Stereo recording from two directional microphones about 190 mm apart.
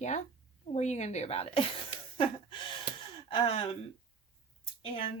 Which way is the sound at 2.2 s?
25° left (ahead or behind).